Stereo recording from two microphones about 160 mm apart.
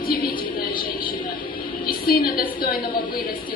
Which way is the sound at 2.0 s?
65° left (ahead or behind).